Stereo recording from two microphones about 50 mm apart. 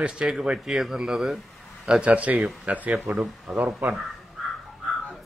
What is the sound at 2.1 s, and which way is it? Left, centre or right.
Speech, right.